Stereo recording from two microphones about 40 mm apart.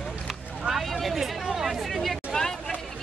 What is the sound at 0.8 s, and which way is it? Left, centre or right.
Speech, centre.